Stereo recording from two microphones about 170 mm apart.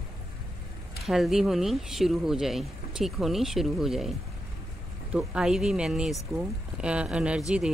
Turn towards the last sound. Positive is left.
turn(degrees=-5)  # may be behind; listen again after turning